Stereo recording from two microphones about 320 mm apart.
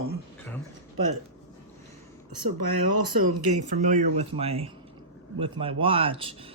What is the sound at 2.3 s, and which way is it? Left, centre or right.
Speech, right.